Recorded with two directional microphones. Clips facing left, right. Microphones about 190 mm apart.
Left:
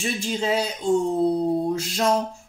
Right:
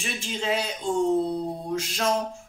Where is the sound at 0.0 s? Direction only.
35° left (ahead or behind).